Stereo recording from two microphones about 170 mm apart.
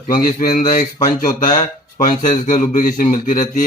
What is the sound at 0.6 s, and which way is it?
Speech, 55° left (ahead or behind).